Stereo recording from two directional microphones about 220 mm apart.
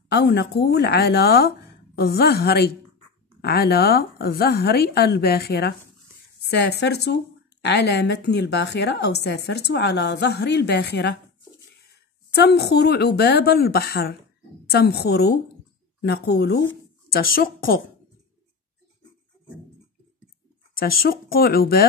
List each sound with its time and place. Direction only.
0.1 s speech: 45° left (ahead or behind)
12.4 s speech: 50° left (ahead or behind)
20.7 s speech: 40° left (ahead or behind)